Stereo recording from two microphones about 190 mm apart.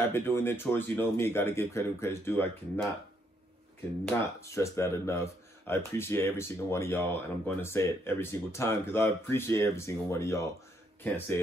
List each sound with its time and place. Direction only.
0.1 s speech: 10° left (ahead or behind)
4.1 s speech: 15° left (ahead or behind)